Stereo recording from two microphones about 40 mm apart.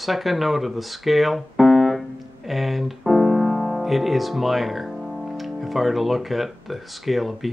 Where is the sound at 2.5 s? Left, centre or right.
Centre.